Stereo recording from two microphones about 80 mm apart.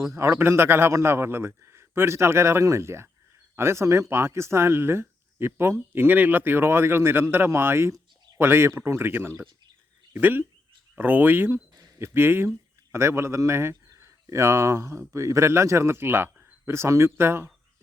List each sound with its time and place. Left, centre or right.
0.1 s speech: right